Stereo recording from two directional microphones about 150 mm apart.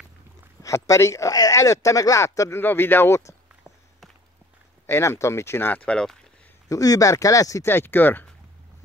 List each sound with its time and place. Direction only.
0.6 s speech: 20° left (ahead or behind)
4.8 s speech: 15° left (ahead or behind)
6.7 s speech: 25° left (ahead or behind)